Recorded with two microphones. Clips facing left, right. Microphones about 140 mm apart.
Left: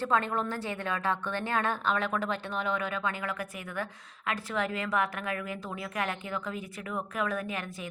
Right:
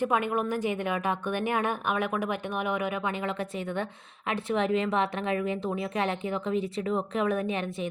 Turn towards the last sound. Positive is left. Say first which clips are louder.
# right 6 dB
turn(degrees=-25)  # may be behind; listen again after turning